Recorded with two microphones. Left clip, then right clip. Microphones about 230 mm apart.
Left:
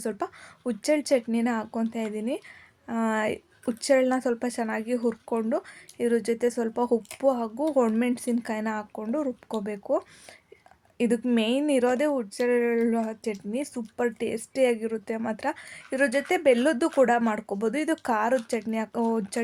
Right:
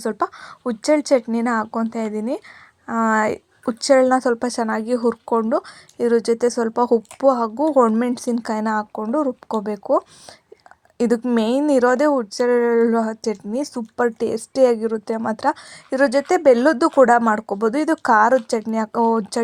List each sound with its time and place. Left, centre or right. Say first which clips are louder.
0.0 s speech: right 9 dB; centre
4.2 s a woman's voice: right 8 dB; centre
16.0 s speech: right 8 dB; centre
16.3 s a woman's voice: right 8 dB; right